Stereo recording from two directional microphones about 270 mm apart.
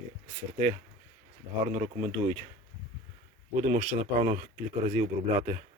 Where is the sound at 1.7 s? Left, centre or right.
Right.